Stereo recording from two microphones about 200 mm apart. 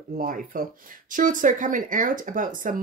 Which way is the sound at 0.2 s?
45° right (ahead or behind).